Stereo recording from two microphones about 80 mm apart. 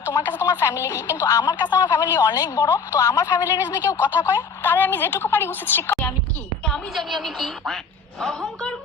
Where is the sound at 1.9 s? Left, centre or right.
Left.